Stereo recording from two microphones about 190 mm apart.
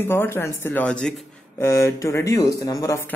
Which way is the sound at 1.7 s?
15° left (ahead or behind).